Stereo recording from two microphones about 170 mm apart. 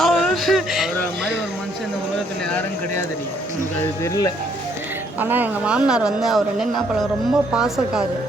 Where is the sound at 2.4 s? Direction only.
10° left (ahead or behind).